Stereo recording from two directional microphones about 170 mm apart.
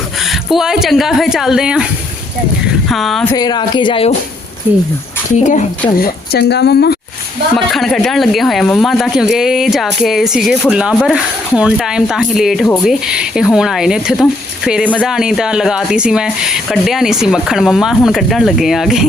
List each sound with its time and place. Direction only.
0.5 s speech: 5° right (ahead or behind)
2.9 s speech: centre (ahead or behind)
3.3 s speech: 25° left (ahead or behind)
5.4 s speech: 45° left (ahead or behind)
6.0 s speech: 75° left (ahead or behind)
7.5 s speech: centre (ahead or behind)